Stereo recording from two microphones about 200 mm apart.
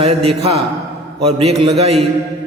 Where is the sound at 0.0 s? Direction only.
30° right (ahead or behind).